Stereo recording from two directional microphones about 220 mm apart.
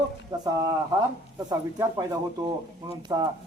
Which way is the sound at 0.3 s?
20° right (ahead or behind).